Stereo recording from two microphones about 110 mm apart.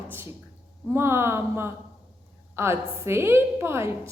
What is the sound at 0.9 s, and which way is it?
Speech, 25° right (ahead or behind).